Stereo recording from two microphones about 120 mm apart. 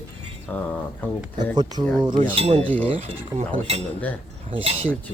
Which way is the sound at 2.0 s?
45° right (ahead or behind).